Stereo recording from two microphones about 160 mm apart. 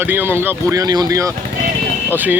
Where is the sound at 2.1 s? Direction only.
10° right (ahead or behind).